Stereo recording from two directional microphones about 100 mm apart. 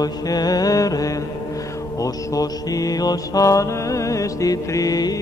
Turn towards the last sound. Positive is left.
turn(degrees=40)  # may be behind; listen again after turning